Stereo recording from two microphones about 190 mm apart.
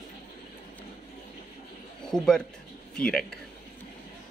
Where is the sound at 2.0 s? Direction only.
5° left (ahead or behind).